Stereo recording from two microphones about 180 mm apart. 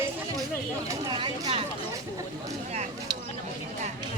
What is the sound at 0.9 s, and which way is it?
Speech, 25° right (ahead or behind).